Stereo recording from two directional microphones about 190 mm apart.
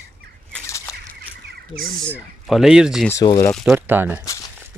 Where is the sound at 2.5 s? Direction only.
5° right (ahead or behind).